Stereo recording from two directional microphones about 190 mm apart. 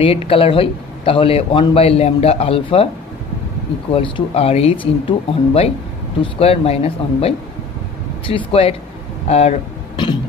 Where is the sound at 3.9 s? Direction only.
30° left (ahead or behind).